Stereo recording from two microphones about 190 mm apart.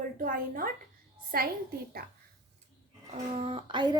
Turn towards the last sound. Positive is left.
turn(degrees=-30)  # may be behind; listen again after turning